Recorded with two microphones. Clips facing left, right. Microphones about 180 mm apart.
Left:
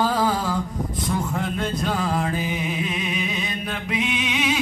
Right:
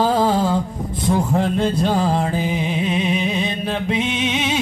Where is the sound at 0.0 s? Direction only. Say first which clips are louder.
Right 5 dB; 25° right (ahead or behind).